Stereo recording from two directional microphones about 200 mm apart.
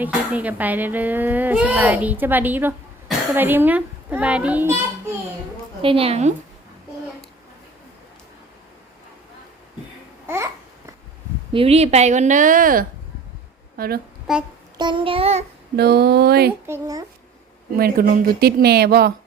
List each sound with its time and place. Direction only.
0.0 s speech: 10° right (ahead or behind)
5.8 s child singing: 30° right (ahead or behind)
10.2 s babbling: 15° right (ahead or behind)
11.5 s a woman's voice: 30° right (ahead or behind); by 14.0 s 50° right (ahead or behind)
14.3 s child singing: centre (ahead or behind)
14.8 s child singing: 25° right (ahead or behind)
15.7 s speech: 55° right (ahead or behind)
16.6 s speech: 15° right (ahead or behind)
17.7 s speech: 50° right (ahead or behind)